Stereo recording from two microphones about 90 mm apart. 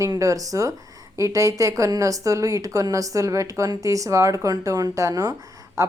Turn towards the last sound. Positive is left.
turn(degrees=-35)  # may be behind; listen again after turning